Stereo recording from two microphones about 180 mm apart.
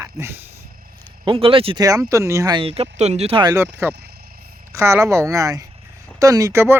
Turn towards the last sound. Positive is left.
turn(degrees=-15)  # may be behind; listen again after turning